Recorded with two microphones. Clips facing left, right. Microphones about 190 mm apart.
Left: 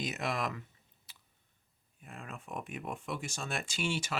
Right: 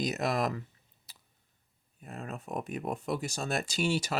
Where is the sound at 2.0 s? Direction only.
40° right (ahead or behind).